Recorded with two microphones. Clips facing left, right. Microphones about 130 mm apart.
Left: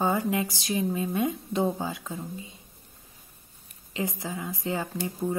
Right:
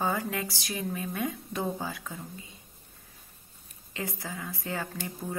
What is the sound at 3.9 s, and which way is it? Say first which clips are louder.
Speech: left 5 dB; 20° left (ahead or behind).